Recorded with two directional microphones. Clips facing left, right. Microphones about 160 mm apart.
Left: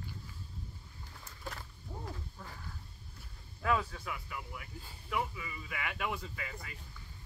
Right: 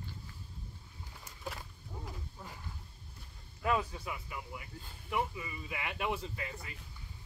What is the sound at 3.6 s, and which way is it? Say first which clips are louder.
Speech: even; 20° right (ahead or behind).